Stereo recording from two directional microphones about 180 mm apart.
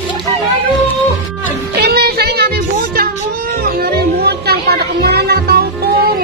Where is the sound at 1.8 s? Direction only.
60° right (ahead or behind).